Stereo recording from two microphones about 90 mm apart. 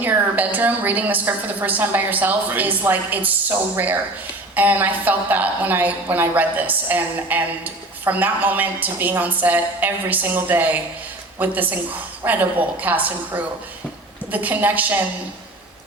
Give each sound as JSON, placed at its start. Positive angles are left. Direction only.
{"t": 0.0, "sound": "a woman's voice", "side_deg": -20}